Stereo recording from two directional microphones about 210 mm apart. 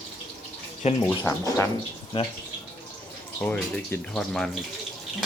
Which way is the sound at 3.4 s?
10° left (ahead or behind).